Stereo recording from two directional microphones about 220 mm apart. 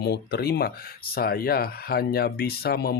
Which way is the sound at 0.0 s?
50° left (ahead or behind).